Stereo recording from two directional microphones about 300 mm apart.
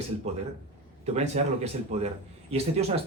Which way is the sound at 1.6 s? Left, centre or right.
Right.